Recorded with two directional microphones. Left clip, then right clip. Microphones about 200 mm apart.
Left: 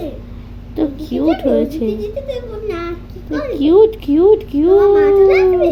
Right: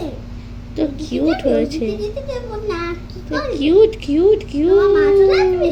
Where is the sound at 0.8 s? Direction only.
20° left (ahead or behind).